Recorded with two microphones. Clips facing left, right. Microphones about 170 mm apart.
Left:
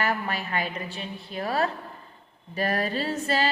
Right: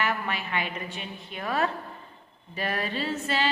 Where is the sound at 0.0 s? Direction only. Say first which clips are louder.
Left 2 dB; 40° left (ahead or behind).